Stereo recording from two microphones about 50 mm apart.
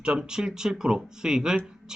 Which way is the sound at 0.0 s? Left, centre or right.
Centre.